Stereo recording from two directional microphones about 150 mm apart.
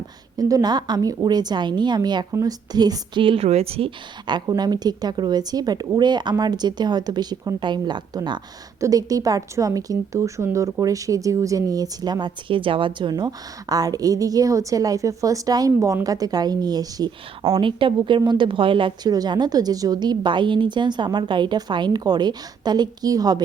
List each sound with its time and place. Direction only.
0.3 s a woman's voice: 25° right (ahead or behind)